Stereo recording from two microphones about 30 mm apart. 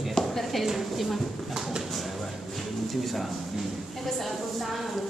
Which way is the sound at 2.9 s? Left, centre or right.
Centre.